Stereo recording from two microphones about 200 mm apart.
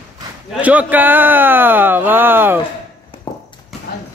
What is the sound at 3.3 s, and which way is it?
Horse, 20° left (ahead or behind).